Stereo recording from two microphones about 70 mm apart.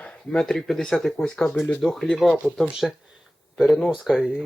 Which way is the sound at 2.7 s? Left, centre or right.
Centre.